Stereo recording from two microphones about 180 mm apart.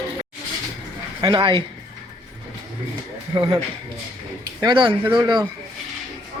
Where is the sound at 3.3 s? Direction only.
25° right (ahead or behind).